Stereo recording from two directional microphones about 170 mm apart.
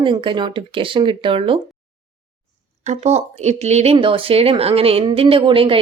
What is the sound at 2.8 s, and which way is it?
Speech, 45° right (ahead or behind).